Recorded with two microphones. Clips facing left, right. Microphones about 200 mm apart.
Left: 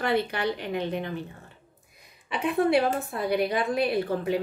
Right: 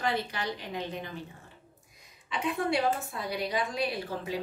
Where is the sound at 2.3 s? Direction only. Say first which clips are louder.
Left 6 dB; 60° left (ahead or behind).